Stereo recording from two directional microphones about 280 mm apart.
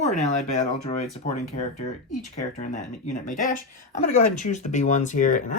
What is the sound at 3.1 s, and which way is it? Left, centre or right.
Speech, left.